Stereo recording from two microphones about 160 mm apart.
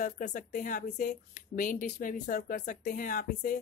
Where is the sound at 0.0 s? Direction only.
50° left (ahead or behind).